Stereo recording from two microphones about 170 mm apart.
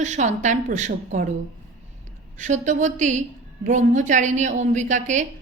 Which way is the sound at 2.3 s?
45° right (ahead or behind).